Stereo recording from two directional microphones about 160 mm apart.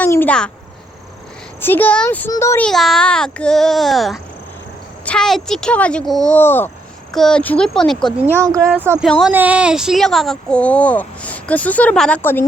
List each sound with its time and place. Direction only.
0.0 s a sound: 10° left (ahead or behind)
1.6 s speech: 10° left (ahead or behind)
2.6 s a child's voice: centre (ahead or behind)
7.1 s a child's voice: 5° left (ahead or behind)
8.4 s speech: 20° right (ahead or behind); by 12.5 s 15° left (ahead or behind)